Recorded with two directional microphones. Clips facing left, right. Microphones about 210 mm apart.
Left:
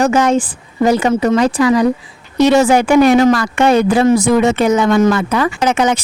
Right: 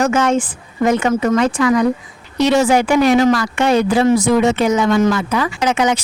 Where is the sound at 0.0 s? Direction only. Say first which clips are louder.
Left 3 dB; 35° left (ahead or behind).